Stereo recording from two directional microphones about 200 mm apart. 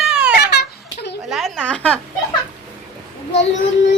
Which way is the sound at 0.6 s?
60° left (ahead or behind).